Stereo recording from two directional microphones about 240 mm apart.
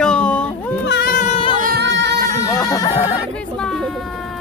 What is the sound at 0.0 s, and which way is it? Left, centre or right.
Baby cry, centre.